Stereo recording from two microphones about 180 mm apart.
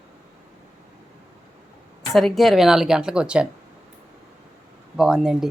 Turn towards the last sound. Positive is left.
turn(degrees=-5)  # may be behind; listen again after turning